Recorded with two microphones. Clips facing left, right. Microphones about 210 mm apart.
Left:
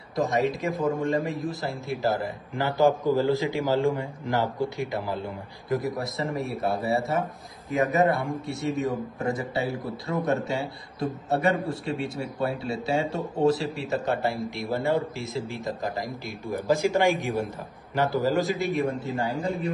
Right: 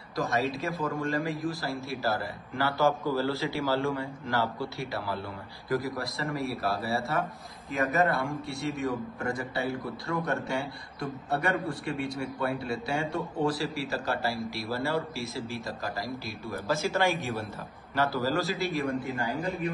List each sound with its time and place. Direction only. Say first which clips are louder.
0.1 s a man's voice: left 4 dB; 20° left (ahead or behind)
8.5 s a man's voice: left 4 dB; 20° left (ahead or behind)